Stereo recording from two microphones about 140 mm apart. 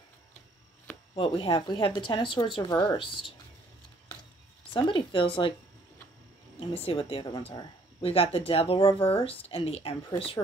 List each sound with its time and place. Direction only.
1.1 s a woman's voice: 40° left (ahead or behind)
4.7 s a woman's voice: 35° left (ahead or behind)
6.6 s a woman's voice: 40° left (ahead or behind)